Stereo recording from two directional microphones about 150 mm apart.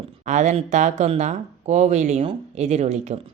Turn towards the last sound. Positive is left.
turn(degrees=-50)  # may be behind; listen again after turning